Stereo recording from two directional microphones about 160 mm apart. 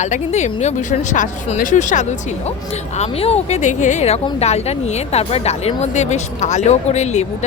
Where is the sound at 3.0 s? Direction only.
40° left (ahead or behind).